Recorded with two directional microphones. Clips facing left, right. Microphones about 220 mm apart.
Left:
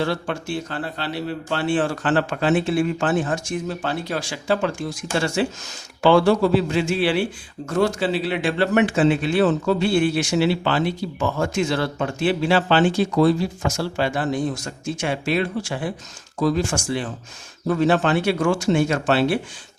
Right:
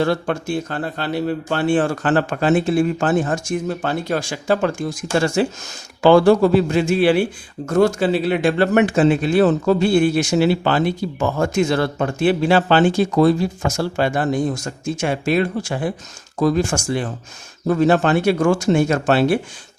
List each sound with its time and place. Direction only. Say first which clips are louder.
0.0 s a man's voice: right 5 dB; 50° right (ahead or behind)